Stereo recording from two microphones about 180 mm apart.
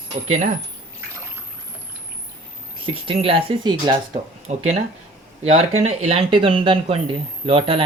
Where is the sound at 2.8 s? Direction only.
30° right (ahead or behind).